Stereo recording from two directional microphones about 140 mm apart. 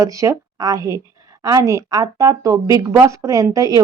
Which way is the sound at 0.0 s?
25° right (ahead or behind).